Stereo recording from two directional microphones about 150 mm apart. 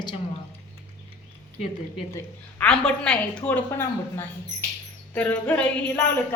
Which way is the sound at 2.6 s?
5° left (ahead or behind).